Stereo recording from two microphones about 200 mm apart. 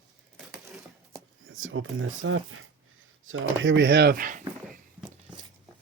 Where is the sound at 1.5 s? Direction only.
90° right.